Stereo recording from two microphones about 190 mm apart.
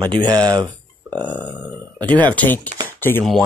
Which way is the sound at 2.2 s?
10° left (ahead or behind).